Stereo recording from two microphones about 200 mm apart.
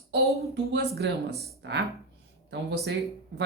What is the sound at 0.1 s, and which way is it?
Speech, 60° right (ahead or behind).